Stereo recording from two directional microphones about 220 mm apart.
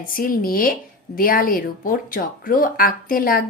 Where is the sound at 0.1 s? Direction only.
40° left (ahead or behind).